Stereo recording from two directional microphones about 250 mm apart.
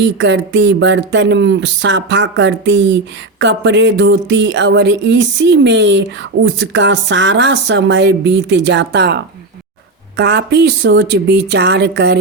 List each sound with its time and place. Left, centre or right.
0.0 s speech: right